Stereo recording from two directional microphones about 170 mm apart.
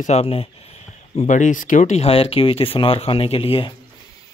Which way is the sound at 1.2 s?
45° left (ahead or behind).